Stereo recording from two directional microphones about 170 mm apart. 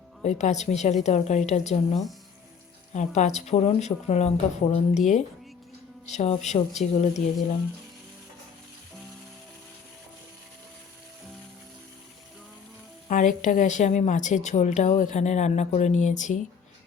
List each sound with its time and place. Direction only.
0.2 s speech: 45° left (ahead or behind)
3.2 s speech: 40° left (ahead or behind)
13.1 s a woman's voice: 50° left (ahead or behind)